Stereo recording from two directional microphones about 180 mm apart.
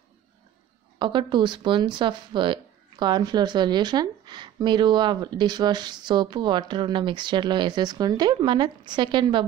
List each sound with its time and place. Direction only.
0.9 s speech: 25° right (ahead or behind)